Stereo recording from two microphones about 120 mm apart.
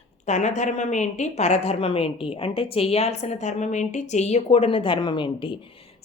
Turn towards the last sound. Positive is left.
turn(degrees=45)  # may be behind; listen again after turning